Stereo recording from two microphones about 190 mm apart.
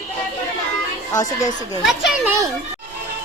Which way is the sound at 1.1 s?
20° left (ahead or behind).